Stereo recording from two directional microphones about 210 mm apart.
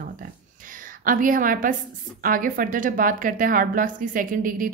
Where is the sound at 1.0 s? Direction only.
40° right (ahead or behind).